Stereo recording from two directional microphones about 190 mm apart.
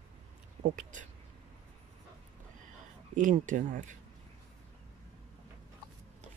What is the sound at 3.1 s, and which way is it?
Speech, 40° right (ahead or behind).